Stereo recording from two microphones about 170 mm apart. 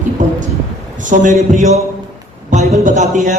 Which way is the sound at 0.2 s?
45° right (ahead or behind).